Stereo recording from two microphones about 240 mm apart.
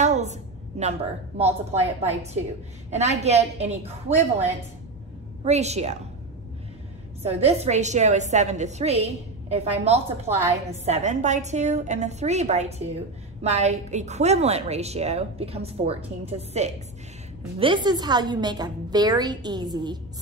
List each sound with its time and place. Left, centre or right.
0.0 s a sound: right
1.4 s a woman's voice: right
5.4 s a woman's voice: right
7.2 s a woman's voice: right